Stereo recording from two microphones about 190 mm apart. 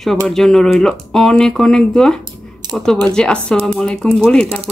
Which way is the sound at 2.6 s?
20° right (ahead or behind).